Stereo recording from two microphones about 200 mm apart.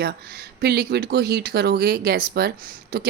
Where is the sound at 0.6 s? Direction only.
55° right (ahead or behind).